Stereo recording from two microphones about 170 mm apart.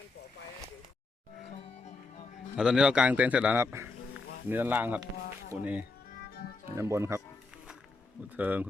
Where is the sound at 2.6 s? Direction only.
5° right (ahead or behind).